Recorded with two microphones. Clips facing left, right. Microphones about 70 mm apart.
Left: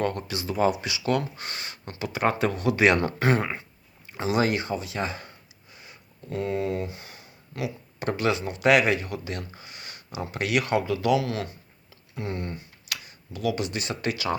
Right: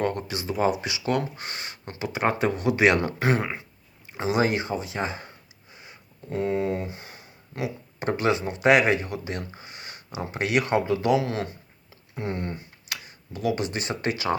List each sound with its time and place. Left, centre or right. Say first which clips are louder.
0.0 s speech: right 1 dB; centre
4.2 s speech: right 1 dB; right